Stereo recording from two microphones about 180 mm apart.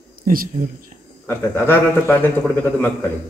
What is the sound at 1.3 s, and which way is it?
A man's voice, 15° left (ahead or behind).